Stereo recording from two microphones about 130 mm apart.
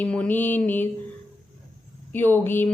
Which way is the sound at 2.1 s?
15° left (ahead or behind).